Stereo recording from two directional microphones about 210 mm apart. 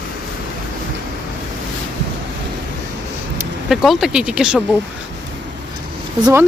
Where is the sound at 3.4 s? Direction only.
Centre (ahead or behind).